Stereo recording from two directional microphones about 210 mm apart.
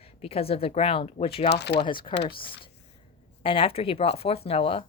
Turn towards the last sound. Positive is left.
turn(degrees=30)  # may be behind; listen again after turning